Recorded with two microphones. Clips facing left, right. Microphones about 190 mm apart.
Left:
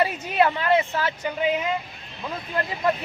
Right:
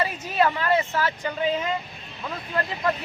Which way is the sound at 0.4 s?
20° left (ahead or behind).